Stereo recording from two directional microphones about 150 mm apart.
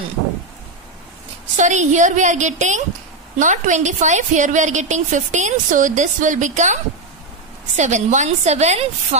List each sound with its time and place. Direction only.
1.6 s a woman's voice: 50° right (ahead or behind)